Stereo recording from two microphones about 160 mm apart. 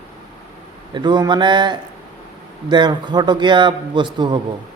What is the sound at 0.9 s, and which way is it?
A man's voice, 30° right (ahead or behind).